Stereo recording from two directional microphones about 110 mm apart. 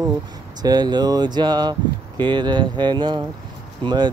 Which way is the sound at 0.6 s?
40° right (ahead or behind).